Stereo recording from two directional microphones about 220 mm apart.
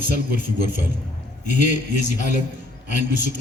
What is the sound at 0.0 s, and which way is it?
A man's voice, 35° left (ahead or behind).